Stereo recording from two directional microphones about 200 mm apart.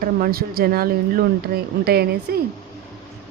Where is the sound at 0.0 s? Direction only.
45° right (ahead or behind).